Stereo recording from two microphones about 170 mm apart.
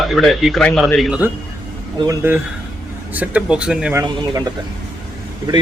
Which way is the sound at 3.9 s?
25° right (ahead or behind).